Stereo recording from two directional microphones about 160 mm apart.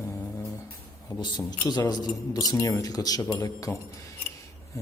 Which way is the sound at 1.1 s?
25° left (ahead or behind).